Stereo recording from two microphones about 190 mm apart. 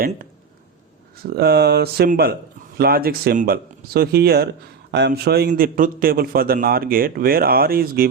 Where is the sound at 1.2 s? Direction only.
55° right (ahead or behind).